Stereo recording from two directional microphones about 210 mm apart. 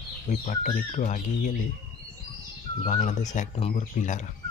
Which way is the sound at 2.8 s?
35° left (ahead or behind).